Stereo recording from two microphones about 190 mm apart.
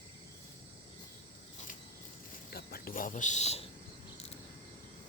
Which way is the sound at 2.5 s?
50° left (ahead or behind).